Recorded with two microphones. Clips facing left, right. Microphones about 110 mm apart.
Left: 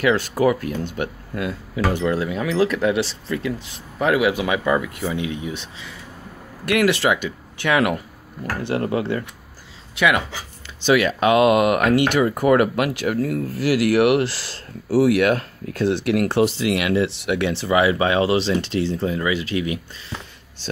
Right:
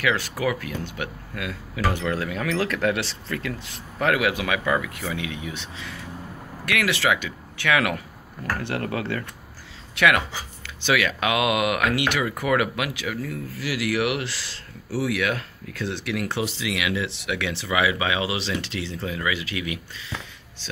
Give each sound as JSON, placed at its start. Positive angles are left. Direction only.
{"t": 0.0, "sound": "speech", "side_deg": 30}
{"t": 1.8, "sound": "speech", "side_deg": 20}
{"t": 7.0, "sound": "speech", "side_deg": 25}
{"t": 10.9, "sound": "speech", "side_deg": 30}
{"t": 17.5, "sound": "speech", "side_deg": 30}